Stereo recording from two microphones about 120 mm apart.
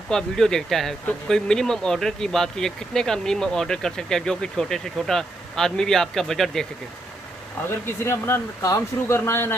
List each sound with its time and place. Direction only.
0.1 s speech: 5° left (ahead or behind)
7.8 s speech: 20° left (ahead or behind)